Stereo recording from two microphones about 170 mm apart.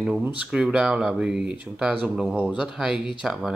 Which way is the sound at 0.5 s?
5° right (ahead or behind).